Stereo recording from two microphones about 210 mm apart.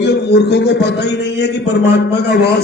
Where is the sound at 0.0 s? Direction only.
55° left (ahead or behind).